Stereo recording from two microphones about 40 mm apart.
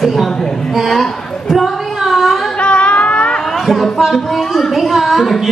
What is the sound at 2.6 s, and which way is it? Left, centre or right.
Music, left.